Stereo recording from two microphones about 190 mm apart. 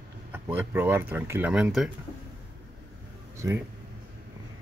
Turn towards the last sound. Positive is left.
turn(degrees=-15)  # may be behind; listen again after turning